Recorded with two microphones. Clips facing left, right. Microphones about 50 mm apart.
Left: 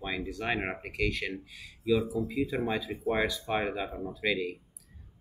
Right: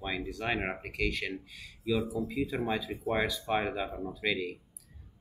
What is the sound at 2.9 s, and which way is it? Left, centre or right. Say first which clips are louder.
Speech: left 2 dB; left.